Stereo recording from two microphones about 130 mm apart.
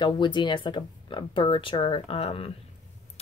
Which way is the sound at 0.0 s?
35° left (ahead or behind).